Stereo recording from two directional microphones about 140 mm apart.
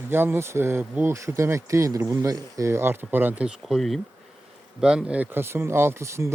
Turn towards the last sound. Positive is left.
turn(degrees=-20)  # may be behind; listen again after turning